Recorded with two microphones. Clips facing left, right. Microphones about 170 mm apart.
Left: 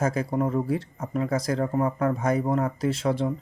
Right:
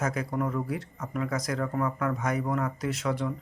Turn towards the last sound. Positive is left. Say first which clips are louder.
# left 5 dB
turn(degrees=30)  # may be behind; listen again after turning